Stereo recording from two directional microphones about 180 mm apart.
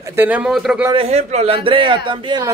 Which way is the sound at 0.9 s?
35° right (ahead or behind).